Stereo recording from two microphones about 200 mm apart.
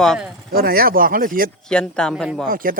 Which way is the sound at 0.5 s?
50° right (ahead or behind).